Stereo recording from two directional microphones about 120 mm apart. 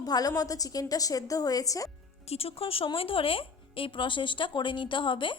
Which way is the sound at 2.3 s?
55° left (ahead or behind).